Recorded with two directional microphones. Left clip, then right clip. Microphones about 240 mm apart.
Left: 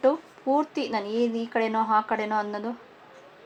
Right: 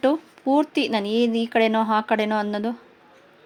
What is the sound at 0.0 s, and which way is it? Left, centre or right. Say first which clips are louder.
Speech: right 2 dB; right.